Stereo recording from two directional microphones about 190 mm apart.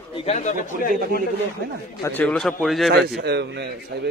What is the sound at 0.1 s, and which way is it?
Speech, 35° left (ahead or behind).